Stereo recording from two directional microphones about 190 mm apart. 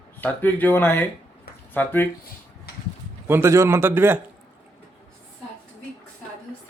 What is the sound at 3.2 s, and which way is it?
Speech, 15° right (ahead or behind).